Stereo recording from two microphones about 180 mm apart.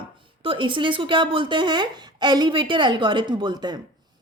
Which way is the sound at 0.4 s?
30° right (ahead or behind).